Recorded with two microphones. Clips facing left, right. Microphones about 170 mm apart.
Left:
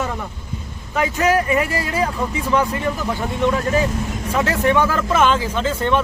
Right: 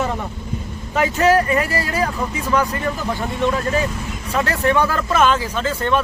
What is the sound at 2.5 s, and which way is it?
Speech, 15° left (ahead or behind).